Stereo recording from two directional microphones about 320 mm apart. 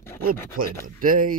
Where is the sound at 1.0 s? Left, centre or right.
Right.